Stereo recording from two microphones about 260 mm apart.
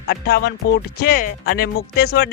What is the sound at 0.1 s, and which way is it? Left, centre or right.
Speech, left.